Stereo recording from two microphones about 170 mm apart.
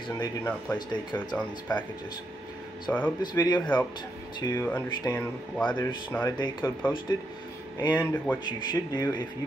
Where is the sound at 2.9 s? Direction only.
15° left (ahead or behind).